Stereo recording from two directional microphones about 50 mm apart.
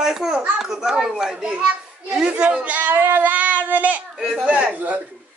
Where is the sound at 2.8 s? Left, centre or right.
Right.